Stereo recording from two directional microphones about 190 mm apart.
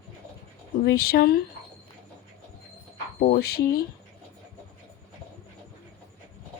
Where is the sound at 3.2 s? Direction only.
55° left (ahead or behind).